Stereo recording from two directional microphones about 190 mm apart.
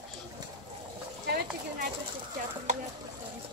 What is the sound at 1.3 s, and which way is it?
Clip-clop, 55° right (ahead or behind).